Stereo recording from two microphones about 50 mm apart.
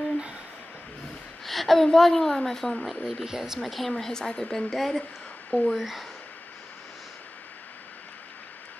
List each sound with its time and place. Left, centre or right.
1.4 s a woman's voice: centre
3.0 s a woman's voice: centre
5.8 s a woman's voice: centre